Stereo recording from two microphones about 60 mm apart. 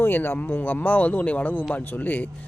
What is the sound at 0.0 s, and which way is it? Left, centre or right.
Speech, left.